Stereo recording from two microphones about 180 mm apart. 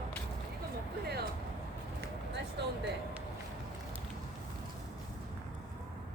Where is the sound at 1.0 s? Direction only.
60° right (ahead or behind).